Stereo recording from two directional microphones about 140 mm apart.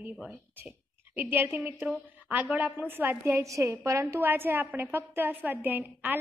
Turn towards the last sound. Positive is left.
turn(degrees=-15)  # may be behind; listen again after turning